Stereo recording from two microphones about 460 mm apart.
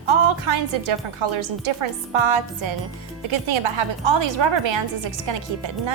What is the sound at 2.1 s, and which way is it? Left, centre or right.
Music, right.